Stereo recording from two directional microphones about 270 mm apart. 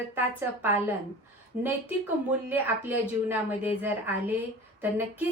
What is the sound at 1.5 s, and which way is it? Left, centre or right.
Speech, right.